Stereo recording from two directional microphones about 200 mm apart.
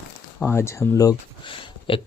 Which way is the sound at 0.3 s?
10° left (ahead or behind).